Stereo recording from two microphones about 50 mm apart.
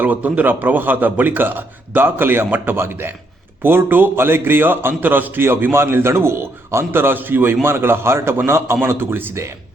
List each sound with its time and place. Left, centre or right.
0.0 s a man's voice: right